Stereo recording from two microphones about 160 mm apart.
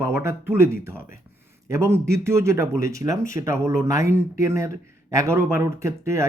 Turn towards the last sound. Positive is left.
turn(degrees=-20)  # may be behind; listen again after turning